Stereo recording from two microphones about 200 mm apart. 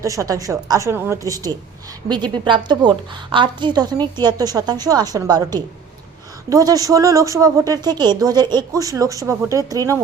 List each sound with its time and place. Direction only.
0.0 s a woman's voice: 15° right (ahead or behind)